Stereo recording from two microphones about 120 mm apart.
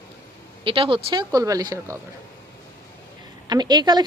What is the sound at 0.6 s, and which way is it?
Speech, 45° right (ahead or behind).